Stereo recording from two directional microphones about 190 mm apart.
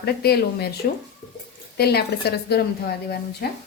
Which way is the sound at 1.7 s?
55° left (ahead or behind).